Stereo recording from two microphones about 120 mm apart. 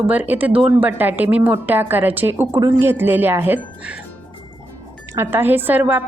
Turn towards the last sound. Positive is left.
turn(degrees=-15)  # may be behind; listen again after turning